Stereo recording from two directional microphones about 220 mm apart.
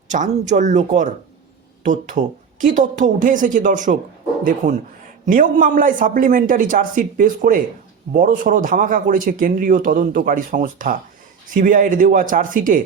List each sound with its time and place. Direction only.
0.1 s a man's voice: 35° right (ahead or behind)
5.2 s a man's voice: 35° right (ahead or behind)